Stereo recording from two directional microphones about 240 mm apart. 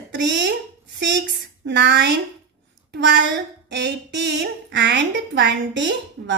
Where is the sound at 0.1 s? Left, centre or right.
Right.